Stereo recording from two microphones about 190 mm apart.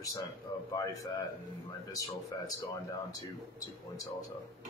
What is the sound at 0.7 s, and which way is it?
Speech, 20° left (ahead or behind).